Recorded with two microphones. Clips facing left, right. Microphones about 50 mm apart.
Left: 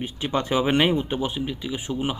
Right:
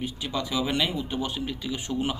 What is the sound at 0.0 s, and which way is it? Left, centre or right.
Speech, left.